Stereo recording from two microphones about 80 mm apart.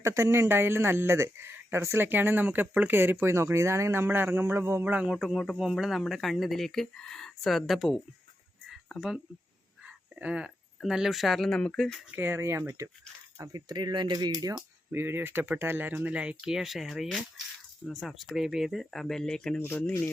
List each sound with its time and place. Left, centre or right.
0.0 s speech: right; by 5.2 s centre
5.2 s speech: centre
9.0 s speech: centre
9.8 s a sound: centre
10.8 s speech: centre
12.1 s speech: right
13.4 s speech: right
14.9 s speech: right
16.1 s speech: centre
19.5 s speech: left